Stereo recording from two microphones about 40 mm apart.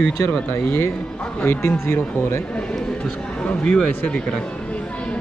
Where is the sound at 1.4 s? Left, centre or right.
Left.